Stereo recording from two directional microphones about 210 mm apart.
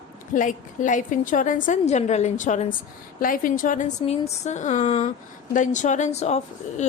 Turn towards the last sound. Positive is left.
turn(degrees=30)  # may be behind; listen again after turning